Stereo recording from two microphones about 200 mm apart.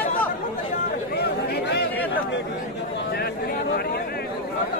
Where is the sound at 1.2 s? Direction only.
50° left (ahead or behind).